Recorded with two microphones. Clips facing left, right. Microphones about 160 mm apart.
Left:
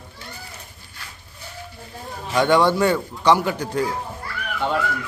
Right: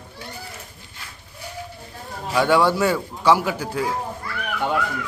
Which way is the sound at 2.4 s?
5° right (ahead or behind).